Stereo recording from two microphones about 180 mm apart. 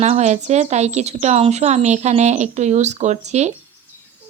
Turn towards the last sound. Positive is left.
turn(degrees=-40)  # may be behind; listen again after turning